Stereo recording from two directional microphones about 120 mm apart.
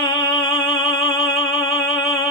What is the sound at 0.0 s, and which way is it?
Music, 40° left (ahead or behind).